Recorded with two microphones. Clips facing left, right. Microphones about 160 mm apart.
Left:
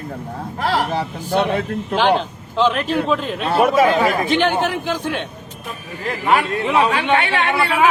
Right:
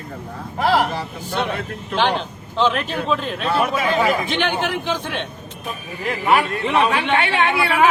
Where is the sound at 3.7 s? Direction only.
45° left (ahead or behind).